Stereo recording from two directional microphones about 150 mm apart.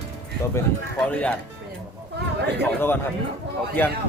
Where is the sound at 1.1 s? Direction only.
10° left (ahead or behind).